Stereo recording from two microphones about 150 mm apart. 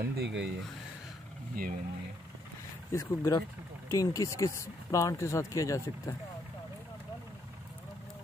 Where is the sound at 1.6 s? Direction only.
70° right (ahead or behind).